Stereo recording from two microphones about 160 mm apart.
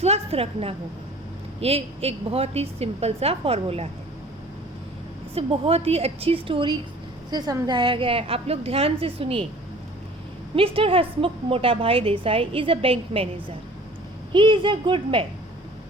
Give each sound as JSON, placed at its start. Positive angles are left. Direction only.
{"t": 0.0, "sound": "a sound", "side_deg": -40}
{"t": 1.6, "sound": "a woman's voice", "side_deg": -40}
{"t": 5.3, "sound": "a woman's voice", "side_deg": -35}
{"t": 10.5, "sound": "a woman's voice", "side_deg": -35}
{"t": 14.3, "sound": "a woman's voice", "side_deg": -30}